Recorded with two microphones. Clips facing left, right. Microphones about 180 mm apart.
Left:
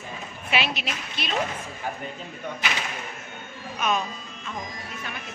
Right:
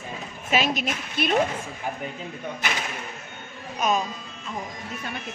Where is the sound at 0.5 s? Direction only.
45° right (ahead or behind).